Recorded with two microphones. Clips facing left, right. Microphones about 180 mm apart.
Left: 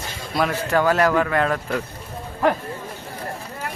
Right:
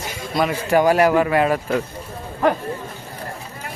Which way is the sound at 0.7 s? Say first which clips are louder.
Right 4 dB; 15° right (ahead or behind).